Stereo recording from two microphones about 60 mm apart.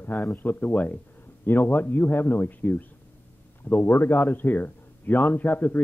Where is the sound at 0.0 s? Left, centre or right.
Left.